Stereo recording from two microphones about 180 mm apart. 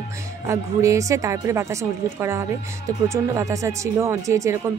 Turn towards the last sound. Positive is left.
turn(degrees=-15)  # may be behind; listen again after turning